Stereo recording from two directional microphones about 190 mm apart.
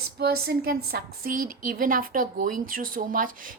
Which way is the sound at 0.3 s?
50° right (ahead or behind).